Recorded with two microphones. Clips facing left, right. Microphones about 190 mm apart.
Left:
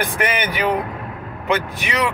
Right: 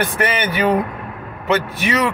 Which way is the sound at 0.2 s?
15° left (ahead or behind).